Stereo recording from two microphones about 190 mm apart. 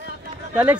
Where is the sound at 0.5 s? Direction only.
5° right (ahead or behind).